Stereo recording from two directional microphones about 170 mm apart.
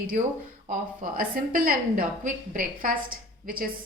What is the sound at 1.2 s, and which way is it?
A woman's voice, 55° right (ahead or behind).